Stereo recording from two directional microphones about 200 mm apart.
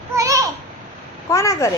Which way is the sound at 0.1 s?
15° right (ahead or behind).